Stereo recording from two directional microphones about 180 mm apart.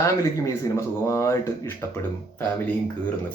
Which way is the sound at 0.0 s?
15° left (ahead or behind).